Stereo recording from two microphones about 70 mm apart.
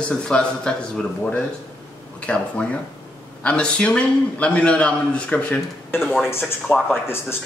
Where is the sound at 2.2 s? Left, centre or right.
Centre.